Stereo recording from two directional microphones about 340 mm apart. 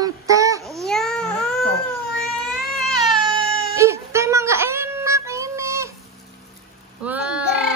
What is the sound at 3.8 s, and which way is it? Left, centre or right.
Child singing, centre.